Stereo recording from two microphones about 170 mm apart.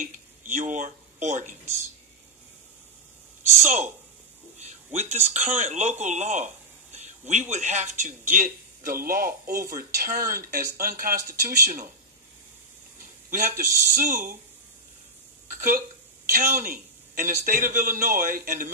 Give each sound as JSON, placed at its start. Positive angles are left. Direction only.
{"t": 0.0, "sound": "speech", "side_deg": -50}
{"t": 3.6, "sound": "speech", "side_deg": -50}
{"t": 4.6, "sound": "a sound", "side_deg": -40}
{"t": 5.3, "sound": "speech", "side_deg": -40}
{"t": 13.3, "sound": "speech", "side_deg": -45}
{"t": 15.5, "sound": "a sound", "side_deg": -55}
{"t": 16.3, "sound": "speech", "side_deg": -55}